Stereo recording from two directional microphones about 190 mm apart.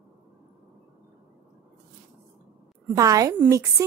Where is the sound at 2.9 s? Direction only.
20° right (ahead or behind).